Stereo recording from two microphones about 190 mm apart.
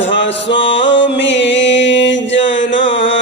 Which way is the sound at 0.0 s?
75° left (ahead or behind).